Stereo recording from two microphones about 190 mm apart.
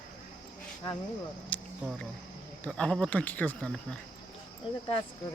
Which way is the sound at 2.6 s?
5° left (ahead or behind).